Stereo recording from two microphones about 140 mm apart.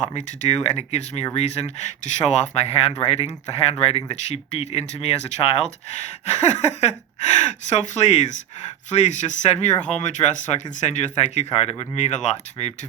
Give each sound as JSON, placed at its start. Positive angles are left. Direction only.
{"t": 0.4, "sound": "speech", "side_deg": 50}